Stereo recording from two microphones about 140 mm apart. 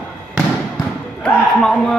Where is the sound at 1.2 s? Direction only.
5° left (ahead or behind).